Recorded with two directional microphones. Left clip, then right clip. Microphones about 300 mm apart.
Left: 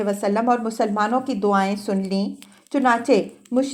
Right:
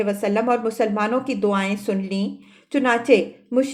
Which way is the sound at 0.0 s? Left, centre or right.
Centre.